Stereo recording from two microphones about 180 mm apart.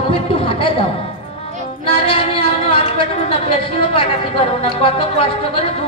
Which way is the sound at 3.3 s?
30° left (ahead or behind).